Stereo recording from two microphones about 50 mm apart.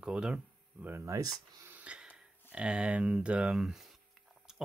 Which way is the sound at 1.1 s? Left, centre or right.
Right.